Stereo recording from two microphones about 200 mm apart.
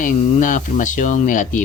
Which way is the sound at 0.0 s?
40° left (ahead or behind).